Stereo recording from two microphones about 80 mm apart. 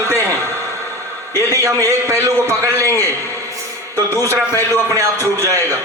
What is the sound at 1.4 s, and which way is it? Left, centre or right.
A man's voice, right.